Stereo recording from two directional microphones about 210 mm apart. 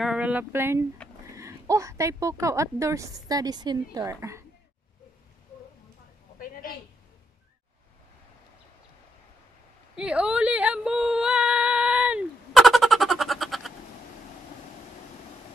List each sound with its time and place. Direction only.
0.0 s speech: 5° right (ahead or behind)
6.4 s a sound: 40° left (ahead or behind)
9.9 s yodeling: 5° right (ahead or behind)